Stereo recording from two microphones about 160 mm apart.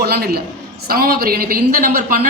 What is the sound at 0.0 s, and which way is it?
Speech, 80° right.